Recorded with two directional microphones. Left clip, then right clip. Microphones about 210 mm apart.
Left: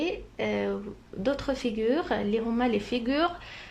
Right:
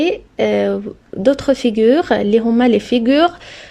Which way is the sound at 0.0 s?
40° right (ahead or behind).